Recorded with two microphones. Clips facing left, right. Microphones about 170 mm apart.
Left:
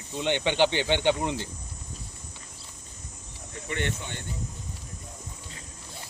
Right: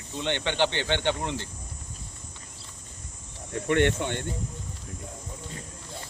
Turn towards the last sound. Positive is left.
turn(degrees=-60)  # may be behind; listen again after turning